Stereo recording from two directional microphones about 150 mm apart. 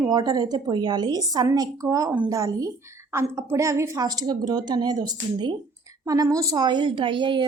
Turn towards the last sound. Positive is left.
turn(degrees=-35)  # may be behind; listen again after turning